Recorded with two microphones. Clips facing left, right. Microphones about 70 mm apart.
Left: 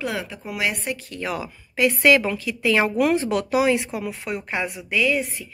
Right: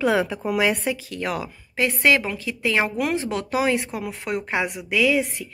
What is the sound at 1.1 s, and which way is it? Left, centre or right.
Speech, right.